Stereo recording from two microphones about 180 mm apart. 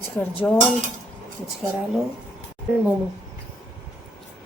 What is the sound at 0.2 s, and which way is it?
Dishes, 5° left (ahead or behind).